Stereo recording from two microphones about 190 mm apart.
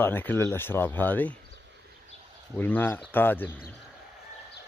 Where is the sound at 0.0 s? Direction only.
10° left (ahead or behind).